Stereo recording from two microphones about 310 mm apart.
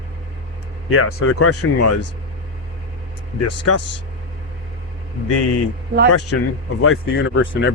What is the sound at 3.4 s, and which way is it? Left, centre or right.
Speech, left.